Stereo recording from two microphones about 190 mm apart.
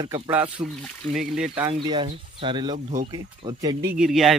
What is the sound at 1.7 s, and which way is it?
Speech, 25° right (ahead or behind).